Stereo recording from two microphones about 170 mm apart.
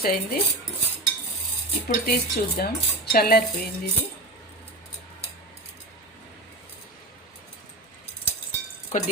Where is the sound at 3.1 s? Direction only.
65° left (ahead or behind).